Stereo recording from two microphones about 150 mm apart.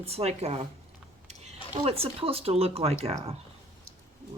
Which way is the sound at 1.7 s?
40° right (ahead or behind).